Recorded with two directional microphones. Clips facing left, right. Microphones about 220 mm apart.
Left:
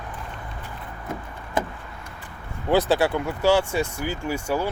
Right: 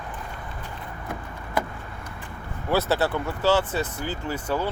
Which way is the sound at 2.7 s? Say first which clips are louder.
Left 3 dB; 15° left (ahead or behind).